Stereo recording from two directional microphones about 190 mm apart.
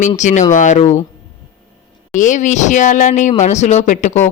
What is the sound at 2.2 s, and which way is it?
Speech, 40° left (ahead or behind).